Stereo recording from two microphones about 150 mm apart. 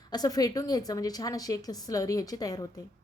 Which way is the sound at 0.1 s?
25° left (ahead or behind).